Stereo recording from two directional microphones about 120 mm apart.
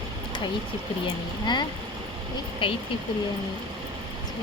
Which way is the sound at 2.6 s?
45° left (ahead or behind).